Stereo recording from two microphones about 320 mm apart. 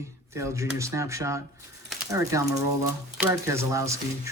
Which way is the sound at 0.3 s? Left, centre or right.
Centre.